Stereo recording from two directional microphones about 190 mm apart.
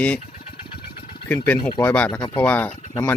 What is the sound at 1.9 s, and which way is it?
Speech, 10° left (ahead or behind).